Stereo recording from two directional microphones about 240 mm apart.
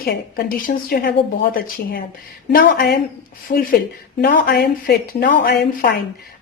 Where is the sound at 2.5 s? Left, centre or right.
Left.